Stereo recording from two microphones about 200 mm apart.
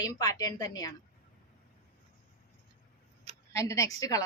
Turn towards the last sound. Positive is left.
turn(degrees=15)  # may be behind; listen again after turning